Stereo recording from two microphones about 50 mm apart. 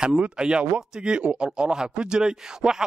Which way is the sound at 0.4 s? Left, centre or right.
Centre.